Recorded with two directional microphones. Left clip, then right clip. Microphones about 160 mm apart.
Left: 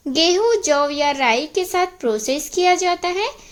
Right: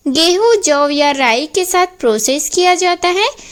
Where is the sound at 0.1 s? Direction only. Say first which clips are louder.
Right 5 dB; 30° right (ahead or behind).